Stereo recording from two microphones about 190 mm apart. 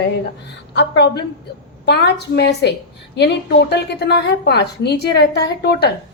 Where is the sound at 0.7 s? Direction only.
60° left (ahead or behind).